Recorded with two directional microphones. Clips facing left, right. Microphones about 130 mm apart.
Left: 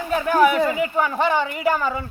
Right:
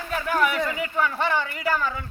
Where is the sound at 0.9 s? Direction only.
15° left (ahead or behind).